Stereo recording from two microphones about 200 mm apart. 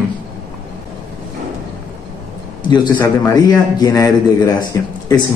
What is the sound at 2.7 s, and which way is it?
A man's voice, 20° left (ahead or behind).